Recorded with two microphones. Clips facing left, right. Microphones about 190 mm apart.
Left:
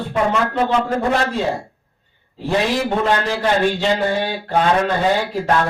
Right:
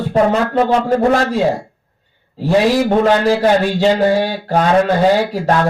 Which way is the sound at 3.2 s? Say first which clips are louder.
Right 5 dB; 40° right (ahead or behind).